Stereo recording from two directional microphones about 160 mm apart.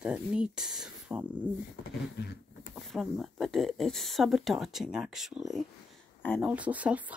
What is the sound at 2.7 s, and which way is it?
Speech, centre (ahead or behind).